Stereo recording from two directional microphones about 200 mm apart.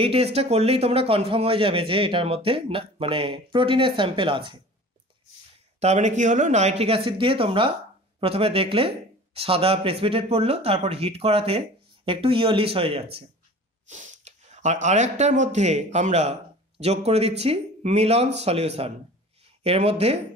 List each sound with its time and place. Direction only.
0.0 s speech: 30° right (ahead or behind)
5.8 s speech: 35° right (ahead or behind)